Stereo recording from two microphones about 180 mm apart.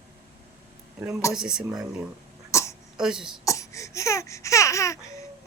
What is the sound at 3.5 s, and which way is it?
Baby cry, 15° left (ahead or behind).